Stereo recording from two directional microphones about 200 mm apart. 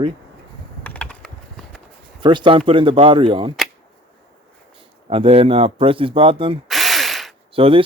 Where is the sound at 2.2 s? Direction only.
25° right (ahead or behind).